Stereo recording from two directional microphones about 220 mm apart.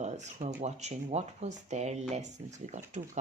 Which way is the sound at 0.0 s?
30° right (ahead or behind).